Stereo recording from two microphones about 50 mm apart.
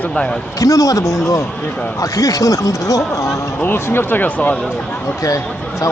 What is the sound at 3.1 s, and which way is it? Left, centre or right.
Speech, left.